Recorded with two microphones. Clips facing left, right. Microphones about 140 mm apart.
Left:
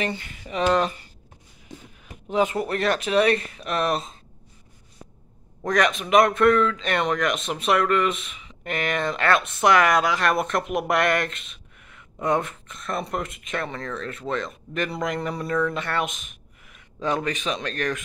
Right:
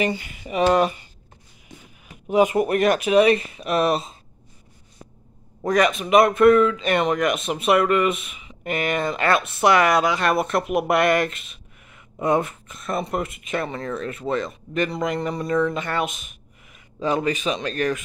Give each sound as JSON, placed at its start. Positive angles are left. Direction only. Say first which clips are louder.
{"t": 0.0, "sound": "speech", "louder": "right 5 dB", "side_deg": -10}
{"t": 2.0, "sound": "speech", "louder": "right 4 dB", "side_deg": -10}
{"t": 5.6, "sound": "speech", "louder": "right 3 dB", "side_deg": -5}